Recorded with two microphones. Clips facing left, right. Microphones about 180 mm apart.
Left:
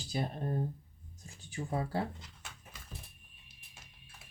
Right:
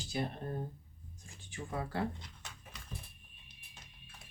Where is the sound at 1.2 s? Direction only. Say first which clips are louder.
Left 5 dB; 35° left (ahead or behind).